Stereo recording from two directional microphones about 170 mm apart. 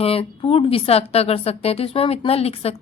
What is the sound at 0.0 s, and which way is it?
A woman's voice, 35° left (ahead or behind).